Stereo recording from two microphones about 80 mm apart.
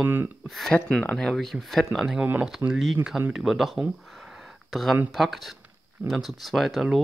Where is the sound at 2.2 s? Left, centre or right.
Centre.